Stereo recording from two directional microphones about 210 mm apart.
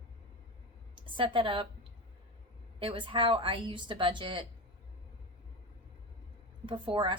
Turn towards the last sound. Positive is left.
turn(degrees=-25)  # may be behind; listen again after turning